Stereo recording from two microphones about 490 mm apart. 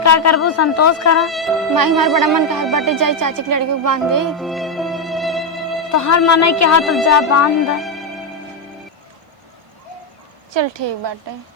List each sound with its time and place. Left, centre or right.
0.0 s speech: left
1.2 s speech: centre
1.7 s speech: right
2.0 s speech: centre
2.7 s music: right
4.3 s music: centre
5.9 s speech: left
7.8 s music: centre
10.5 s speech: right